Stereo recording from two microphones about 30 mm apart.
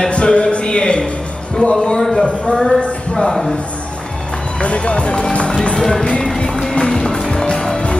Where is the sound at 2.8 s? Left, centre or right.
Left.